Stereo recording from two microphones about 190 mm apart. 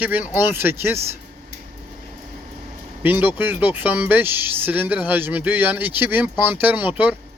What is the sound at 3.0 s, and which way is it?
Speech, 10° right (ahead or behind).